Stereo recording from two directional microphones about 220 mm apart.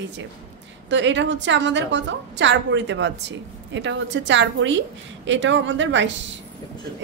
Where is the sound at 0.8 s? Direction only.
55° right (ahead or behind).